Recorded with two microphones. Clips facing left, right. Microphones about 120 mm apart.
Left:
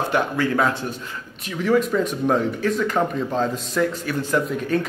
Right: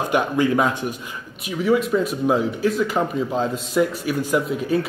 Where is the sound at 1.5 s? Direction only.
5° right (ahead or behind).